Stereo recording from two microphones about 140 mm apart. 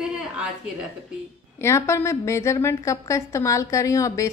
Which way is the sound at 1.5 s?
20° left (ahead or behind).